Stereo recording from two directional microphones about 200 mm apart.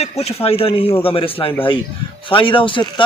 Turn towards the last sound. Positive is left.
turn(degrees=25)  # may be behind; listen again after turning